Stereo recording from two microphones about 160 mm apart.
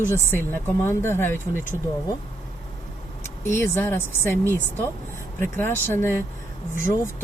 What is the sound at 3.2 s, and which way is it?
Speech, 15° left (ahead or behind).